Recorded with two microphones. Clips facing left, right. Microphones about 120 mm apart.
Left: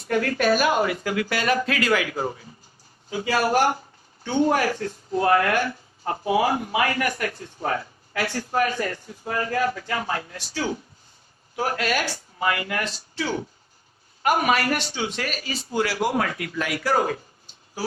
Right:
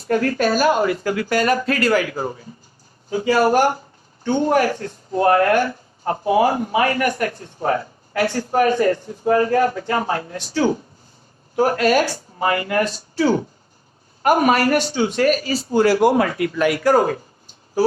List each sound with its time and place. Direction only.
0.1 s speech: 40° right (ahead or behind)